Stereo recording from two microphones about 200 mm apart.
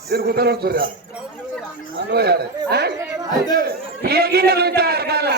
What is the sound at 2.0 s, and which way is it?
A man's voice, 55° right (ahead or behind).